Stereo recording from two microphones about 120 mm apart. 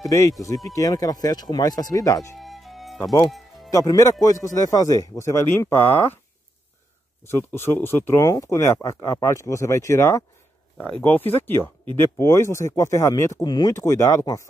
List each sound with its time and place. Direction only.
0.0 s speech: 25° left (ahead or behind)
2.3 s music: centre (ahead or behind)
3.7 s speech: 30° left (ahead or behind)
7.2 s speech: 20° left (ahead or behind)
13.7 s speech: 25° left (ahead or behind)